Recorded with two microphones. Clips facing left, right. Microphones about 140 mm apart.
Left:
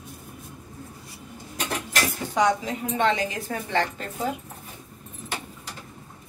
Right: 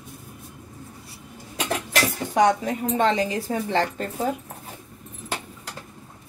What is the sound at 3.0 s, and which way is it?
Speech, 30° right (ahead or behind).